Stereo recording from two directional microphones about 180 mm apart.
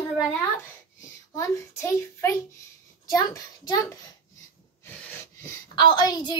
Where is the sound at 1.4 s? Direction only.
15° left (ahead or behind).